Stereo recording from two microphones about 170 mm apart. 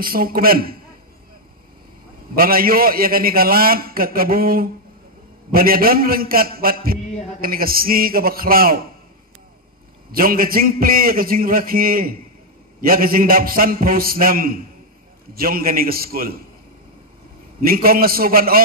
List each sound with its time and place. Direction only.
0.0 s a man's voice: 60° right (ahead or behind)
2.3 s a man's voice: 60° right (ahead or behind)
10.1 s a man's voice: 60° right (ahead or behind)
17.6 s a man's voice: 60° right (ahead or behind)